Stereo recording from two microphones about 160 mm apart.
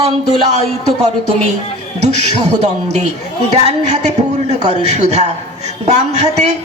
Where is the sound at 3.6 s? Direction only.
45° right (ahead or behind).